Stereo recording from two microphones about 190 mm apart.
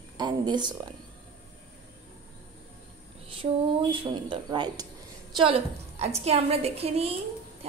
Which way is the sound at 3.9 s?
25° right (ahead or behind).